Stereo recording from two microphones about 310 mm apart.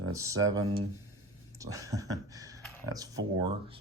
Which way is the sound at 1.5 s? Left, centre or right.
Centre.